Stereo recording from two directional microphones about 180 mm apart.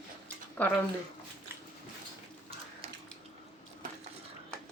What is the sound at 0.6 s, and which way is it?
Speech, 10° left (ahead or behind).